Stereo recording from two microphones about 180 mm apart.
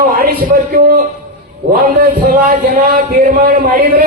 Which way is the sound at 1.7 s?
55° right (ahead or behind).